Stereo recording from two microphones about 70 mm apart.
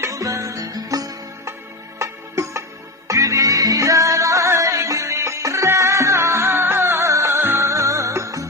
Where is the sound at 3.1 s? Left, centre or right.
Right.